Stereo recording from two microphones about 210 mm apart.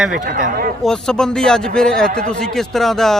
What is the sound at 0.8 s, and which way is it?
Speech, 5° left (ahead or behind).